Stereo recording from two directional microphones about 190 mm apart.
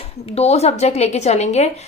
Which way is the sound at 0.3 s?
35° left (ahead or behind).